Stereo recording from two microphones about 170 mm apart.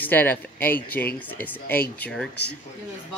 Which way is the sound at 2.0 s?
5° left (ahead or behind).